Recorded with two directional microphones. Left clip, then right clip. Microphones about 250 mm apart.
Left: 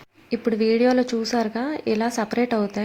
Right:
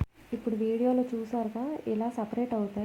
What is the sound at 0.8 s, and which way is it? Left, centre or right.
Speech, left.